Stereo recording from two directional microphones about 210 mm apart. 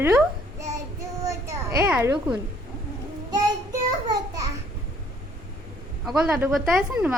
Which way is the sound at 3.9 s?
20° right (ahead or behind).